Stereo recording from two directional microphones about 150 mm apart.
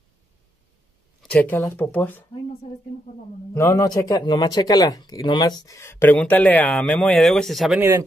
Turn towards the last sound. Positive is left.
turn(degrees=0)  # may be behind; listen again after turning